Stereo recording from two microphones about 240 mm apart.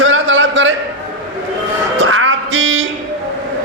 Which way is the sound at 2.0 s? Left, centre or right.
Right.